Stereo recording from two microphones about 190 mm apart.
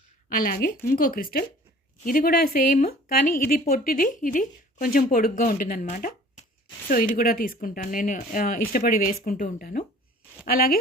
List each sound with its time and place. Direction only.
0.3 s speech: 50° left (ahead or behind)